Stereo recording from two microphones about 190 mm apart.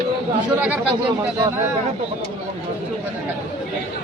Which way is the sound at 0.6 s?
5° right (ahead or behind).